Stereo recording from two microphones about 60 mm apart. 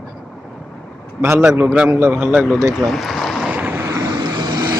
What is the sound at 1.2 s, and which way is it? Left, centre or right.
Speech, right.